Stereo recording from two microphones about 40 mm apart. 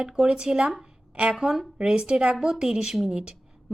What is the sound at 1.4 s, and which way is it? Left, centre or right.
Speech, centre.